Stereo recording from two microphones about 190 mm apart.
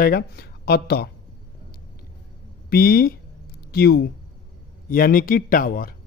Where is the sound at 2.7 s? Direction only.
50° left (ahead or behind).